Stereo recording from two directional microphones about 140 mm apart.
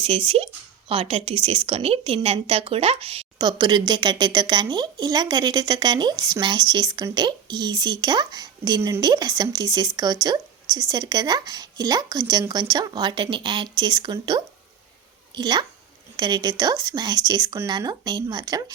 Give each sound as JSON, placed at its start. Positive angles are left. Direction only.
{"t": 0.0, "sound": "a woman's voice", "side_deg": -40}
{"t": 3.3, "sound": "a woman's voice", "side_deg": -30}